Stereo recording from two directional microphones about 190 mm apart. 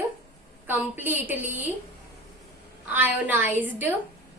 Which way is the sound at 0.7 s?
10° right (ahead or behind).